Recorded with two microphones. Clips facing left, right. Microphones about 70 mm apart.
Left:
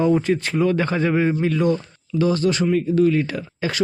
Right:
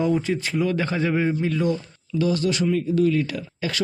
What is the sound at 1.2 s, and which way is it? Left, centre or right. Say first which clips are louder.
Speech: left 3 dB; left.